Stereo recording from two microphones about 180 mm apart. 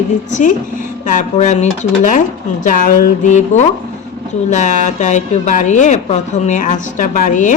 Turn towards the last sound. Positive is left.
turn(degrees=45)  # may be behind; listen again after turning